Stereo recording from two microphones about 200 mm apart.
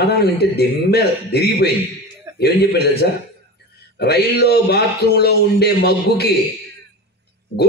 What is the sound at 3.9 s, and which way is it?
Speech, 55° left (ahead or behind).